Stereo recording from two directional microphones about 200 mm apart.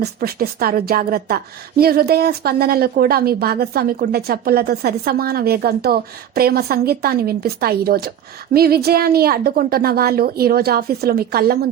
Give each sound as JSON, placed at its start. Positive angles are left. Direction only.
{"t": 0.0, "sound": "a woman's voice", "side_deg": -50}